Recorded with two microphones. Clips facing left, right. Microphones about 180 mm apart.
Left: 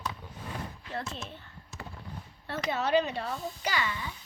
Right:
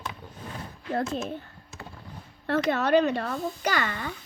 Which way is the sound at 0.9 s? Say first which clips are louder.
Right 10 dB; 45° right (ahead or behind).